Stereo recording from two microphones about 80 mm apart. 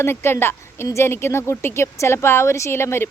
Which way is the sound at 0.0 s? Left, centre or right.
Left.